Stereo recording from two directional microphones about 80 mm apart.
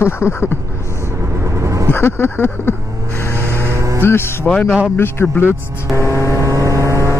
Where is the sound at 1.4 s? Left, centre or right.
Right.